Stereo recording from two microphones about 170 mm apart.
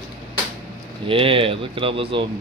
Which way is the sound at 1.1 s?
30° right (ahead or behind).